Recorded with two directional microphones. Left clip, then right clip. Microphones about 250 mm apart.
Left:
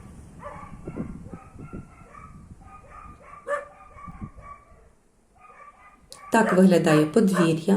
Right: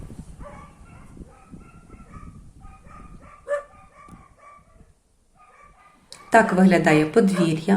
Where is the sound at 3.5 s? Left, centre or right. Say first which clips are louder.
Right 2 dB; left.